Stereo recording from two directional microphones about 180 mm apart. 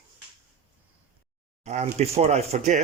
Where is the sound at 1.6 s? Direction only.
40° right (ahead or behind).